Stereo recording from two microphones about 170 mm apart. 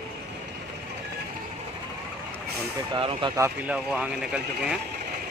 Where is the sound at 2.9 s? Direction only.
30° right (ahead or behind).